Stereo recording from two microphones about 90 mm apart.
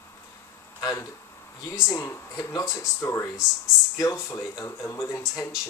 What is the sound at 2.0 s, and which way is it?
Speech, 30° left (ahead or behind).